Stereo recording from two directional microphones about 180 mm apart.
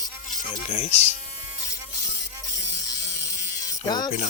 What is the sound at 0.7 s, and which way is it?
Speech, 35° left (ahead or behind).